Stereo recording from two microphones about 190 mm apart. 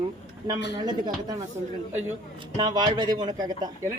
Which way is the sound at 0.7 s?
20° right (ahead or behind).